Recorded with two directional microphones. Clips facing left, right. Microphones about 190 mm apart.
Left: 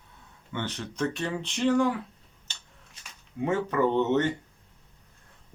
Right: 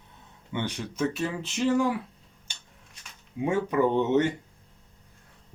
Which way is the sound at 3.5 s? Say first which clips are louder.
Right 1 dB; 10° right (ahead or behind).